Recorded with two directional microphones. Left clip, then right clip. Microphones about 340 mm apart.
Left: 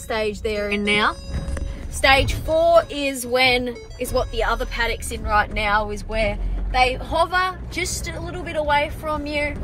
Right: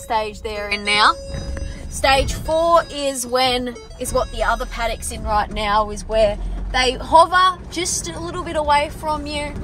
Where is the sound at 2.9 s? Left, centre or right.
Centre.